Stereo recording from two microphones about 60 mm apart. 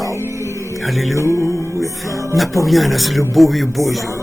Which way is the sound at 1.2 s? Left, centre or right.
Left.